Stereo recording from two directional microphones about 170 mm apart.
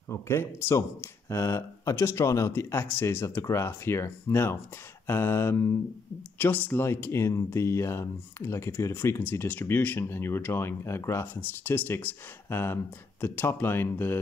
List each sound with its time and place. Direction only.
0.1 s speech: 15° left (ahead or behind)